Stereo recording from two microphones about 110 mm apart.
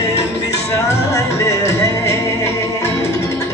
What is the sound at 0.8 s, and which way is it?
Music, 25° left (ahead or behind).